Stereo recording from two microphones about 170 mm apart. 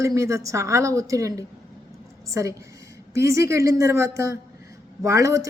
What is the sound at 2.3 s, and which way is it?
A woman's voice, 15° right (ahead or behind).